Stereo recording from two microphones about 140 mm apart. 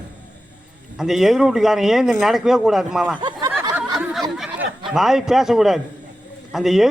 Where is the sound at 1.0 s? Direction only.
Centre (ahead or behind).